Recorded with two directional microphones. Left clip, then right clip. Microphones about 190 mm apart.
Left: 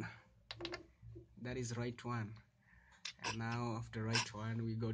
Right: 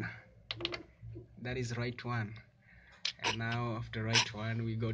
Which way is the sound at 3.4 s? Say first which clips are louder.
Right 5 dB; 45° left (ahead or behind).